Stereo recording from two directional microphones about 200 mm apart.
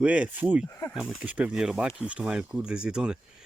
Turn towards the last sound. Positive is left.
turn(degrees=-5)  # may be behind; listen again after turning